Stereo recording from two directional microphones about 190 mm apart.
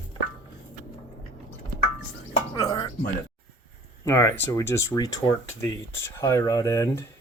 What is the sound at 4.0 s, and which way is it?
Speech, 15° left (ahead or behind).